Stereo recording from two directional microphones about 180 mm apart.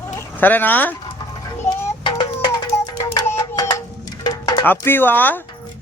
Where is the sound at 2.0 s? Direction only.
30° left (ahead or behind).